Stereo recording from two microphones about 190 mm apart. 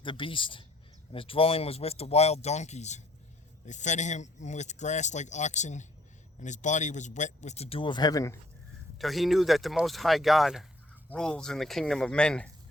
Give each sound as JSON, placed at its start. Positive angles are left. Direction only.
{"t": 0.0, "sound": "speech", "side_deg": 25}
{"t": 9.0, "sound": "speech", "side_deg": 0}